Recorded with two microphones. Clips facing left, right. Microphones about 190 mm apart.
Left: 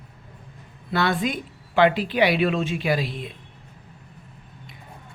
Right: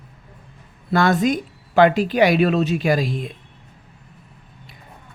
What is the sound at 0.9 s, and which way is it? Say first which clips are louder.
Speech: right 6 dB; 45° right (ahead or behind).